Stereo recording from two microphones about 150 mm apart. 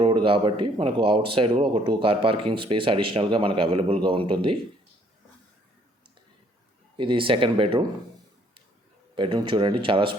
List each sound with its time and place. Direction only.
0.0 s speech: 35° right (ahead or behind)
6.9 s speech: 35° right (ahead or behind)
9.1 s speech: 35° right (ahead or behind)